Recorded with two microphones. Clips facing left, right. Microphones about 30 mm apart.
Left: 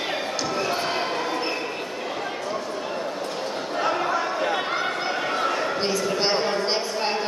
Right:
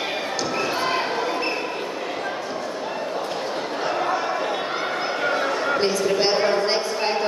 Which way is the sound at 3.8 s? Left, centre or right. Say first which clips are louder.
Even; centre.